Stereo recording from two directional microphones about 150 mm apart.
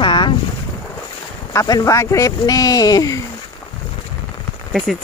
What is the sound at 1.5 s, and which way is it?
Speech, 25° left (ahead or behind).